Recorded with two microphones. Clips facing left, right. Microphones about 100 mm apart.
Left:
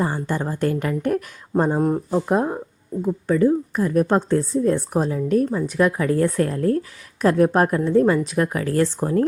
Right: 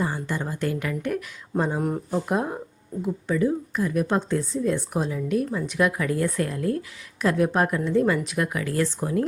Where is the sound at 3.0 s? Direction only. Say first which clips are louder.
Left 5 dB; 40° left (ahead or behind).